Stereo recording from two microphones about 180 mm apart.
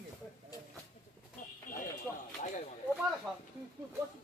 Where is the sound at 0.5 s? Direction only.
20° left (ahead or behind).